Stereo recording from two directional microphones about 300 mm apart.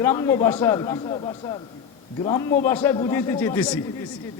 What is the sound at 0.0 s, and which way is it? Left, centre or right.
A man's voice, centre.